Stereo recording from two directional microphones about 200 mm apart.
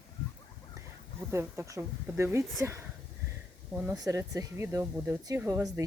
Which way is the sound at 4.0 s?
15° right (ahead or behind).